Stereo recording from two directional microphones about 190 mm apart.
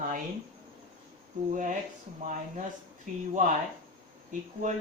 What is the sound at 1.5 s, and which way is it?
Speech, 40° right (ahead or behind).